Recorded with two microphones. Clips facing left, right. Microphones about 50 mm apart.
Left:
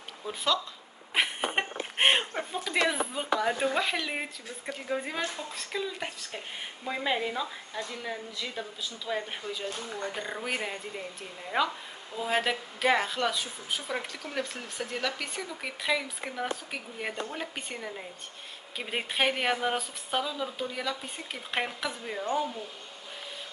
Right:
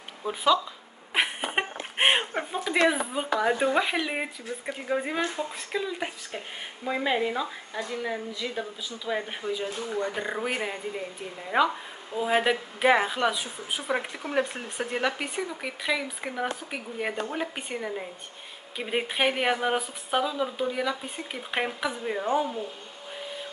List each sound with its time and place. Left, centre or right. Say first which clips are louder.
0.3 s speech: right 6 dB; centre
1.1 s a sound: right 2 dB; centre
3.3 s speech: right 4 dB; centre
15.6 s speech: left 1 dB; centre